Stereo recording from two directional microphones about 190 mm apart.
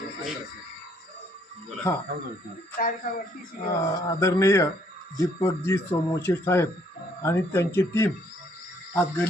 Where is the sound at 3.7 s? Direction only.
15° left (ahead or behind).